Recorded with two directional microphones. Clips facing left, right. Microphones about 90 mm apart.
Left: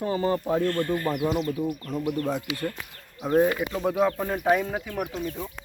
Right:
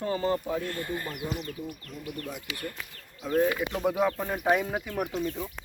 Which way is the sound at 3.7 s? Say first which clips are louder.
Left 2 dB; 5° right (ahead or behind).